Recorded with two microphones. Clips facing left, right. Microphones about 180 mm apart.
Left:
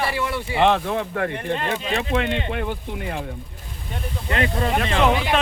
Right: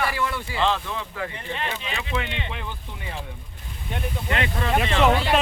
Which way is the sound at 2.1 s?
50° left (ahead or behind).